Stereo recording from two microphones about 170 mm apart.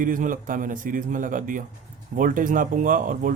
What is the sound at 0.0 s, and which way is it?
A man's voice, 50° right (ahead or behind).